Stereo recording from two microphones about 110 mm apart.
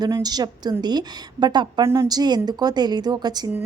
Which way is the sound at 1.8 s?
30° right (ahead or behind).